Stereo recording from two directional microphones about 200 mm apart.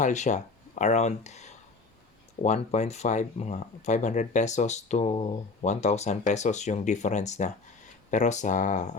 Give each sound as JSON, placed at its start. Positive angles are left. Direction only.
{"t": 0.0, "sound": "speech", "side_deg": 35}